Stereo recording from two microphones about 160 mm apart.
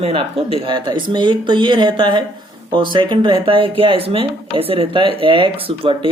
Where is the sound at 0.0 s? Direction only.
40° right (ahead or behind).